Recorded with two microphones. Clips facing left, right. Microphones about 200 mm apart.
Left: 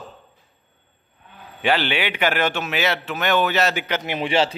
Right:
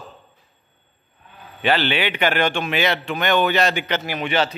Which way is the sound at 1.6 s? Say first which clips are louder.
Right 1 dB; 10° left (ahead or behind).